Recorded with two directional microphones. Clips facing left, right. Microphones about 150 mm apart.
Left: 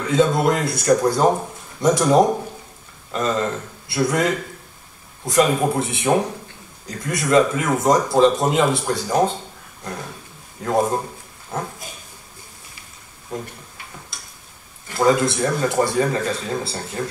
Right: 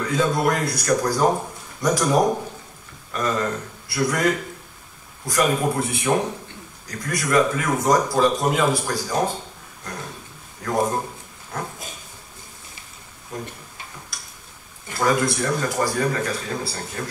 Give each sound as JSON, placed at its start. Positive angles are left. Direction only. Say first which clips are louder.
{"t": 0.1, "sound": "speech", "louder": "left 5 dB", "side_deg": 25}
{"t": 10.6, "sound": "speech", "louder": "left 3 dB", "side_deg": 25}
{"t": 15.0, "sound": "speech", "louder": "left 4 dB", "side_deg": 25}